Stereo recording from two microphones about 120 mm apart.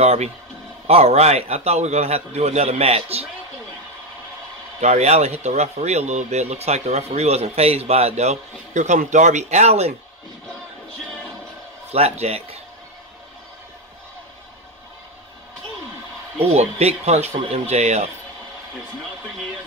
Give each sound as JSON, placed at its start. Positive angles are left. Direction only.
{"t": 0.0, "sound": "a man's voice", "side_deg": -65}
{"t": 4.7, "sound": "speech", "side_deg": -70}
{"t": 11.9, "sound": "a man's voice", "side_deg": -60}
{"t": 16.3, "sound": "a man's voice", "side_deg": -60}